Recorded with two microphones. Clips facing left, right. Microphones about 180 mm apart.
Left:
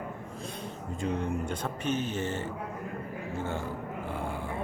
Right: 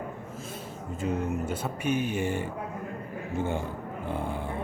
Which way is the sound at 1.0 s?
5° right (ahead or behind).